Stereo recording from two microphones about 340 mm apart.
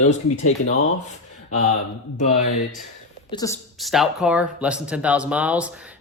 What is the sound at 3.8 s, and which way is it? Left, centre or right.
Speech, centre.